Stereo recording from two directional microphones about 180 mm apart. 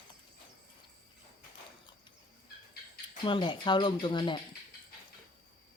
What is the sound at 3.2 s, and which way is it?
Speech, 25° left (ahead or behind).